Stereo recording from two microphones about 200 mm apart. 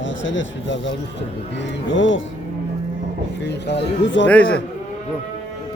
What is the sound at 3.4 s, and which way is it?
Speech, 60° left (ahead or behind).